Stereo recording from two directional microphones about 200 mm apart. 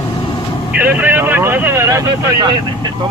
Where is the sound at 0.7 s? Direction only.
10° right (ahead or behind).